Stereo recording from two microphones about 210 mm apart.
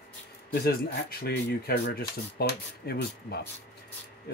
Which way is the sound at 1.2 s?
50° left (ahead or behind).